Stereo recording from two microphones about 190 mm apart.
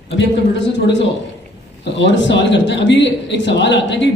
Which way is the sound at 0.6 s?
70° left (ahead or behind).